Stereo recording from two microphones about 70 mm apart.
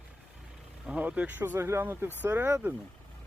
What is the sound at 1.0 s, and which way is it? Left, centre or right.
Speech, right.